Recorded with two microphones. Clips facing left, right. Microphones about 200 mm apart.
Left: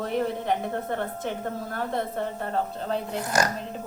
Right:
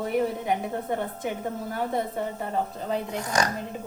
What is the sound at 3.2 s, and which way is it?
Speech, 5° left (ahead or behind).